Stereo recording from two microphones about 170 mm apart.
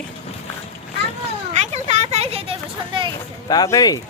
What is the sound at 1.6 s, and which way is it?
Vehicle, 40° right (ahead or behind).